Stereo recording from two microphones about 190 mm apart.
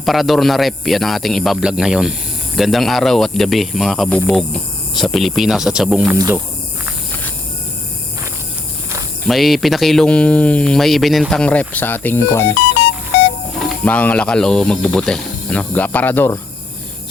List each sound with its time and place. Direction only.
0.0 s speech: centre (ahead or behind)
6.1 s speech: 15° right (ahead or behind)
9.2 s speech: centre (ahead or behind)
13.8 s speech: 10° left (ahead or behind)